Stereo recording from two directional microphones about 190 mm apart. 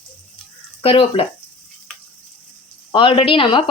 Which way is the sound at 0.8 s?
30° left (ahead or behind).